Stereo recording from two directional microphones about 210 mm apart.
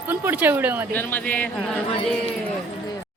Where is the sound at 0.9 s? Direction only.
5° left (ahead or behind).